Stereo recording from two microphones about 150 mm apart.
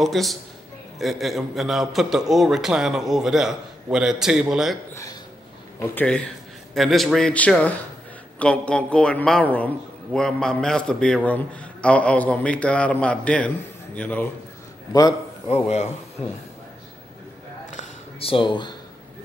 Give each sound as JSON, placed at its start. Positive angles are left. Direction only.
{"t": 0.0, "sound": "a man's voice", "side_deg": 0}
{"t": 5.8, "sound": "a man's voice", "side_deg": 10}
{"t": 14.9, "sound": "a man's voice", "side_deg": 25}
{"t": 18.2, "sound": "speech", "side_deg": 35}